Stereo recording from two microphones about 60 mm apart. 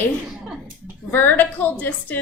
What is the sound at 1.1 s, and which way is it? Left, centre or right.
A woman's voice, left.